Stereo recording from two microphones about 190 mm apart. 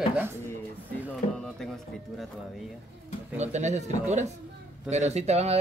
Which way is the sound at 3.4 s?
35° right (ahead or behind).